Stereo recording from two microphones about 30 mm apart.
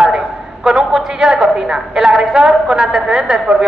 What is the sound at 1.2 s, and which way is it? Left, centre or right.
A woman's voice, right.